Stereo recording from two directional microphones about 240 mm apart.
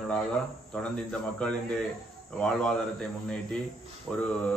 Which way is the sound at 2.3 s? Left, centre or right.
Centre.